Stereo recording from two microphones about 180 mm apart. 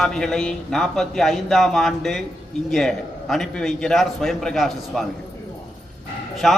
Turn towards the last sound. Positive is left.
turn(degrees=0)  # may be behind; listen again after turning